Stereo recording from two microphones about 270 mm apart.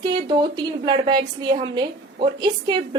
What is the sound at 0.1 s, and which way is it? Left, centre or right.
A woman's voice, centre.